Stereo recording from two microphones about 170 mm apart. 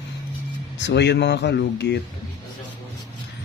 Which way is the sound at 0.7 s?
90° left.